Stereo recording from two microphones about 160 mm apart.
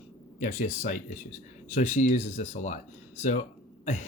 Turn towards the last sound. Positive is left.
turn(degrees=50)  # may be behind; listen again after turning